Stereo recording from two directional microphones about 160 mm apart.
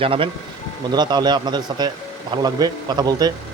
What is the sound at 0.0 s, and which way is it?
A man's voice, 35° right (ahead or behind).